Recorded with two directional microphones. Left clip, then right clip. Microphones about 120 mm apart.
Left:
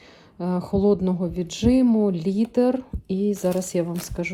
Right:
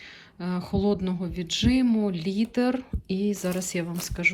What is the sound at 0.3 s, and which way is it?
Speech, 40° left (ahead or behind).